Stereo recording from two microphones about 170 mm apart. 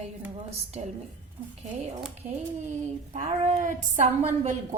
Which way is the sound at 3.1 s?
45° right (ahead or behind).